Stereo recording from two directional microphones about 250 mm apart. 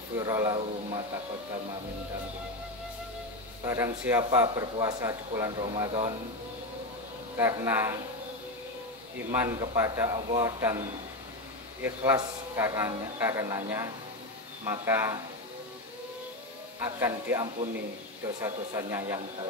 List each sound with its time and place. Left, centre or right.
0.2 s speech: centre
3.6 s speech: centre
7.3 s speech: centre
9.3 s speech: centre
17.0 s speech: centre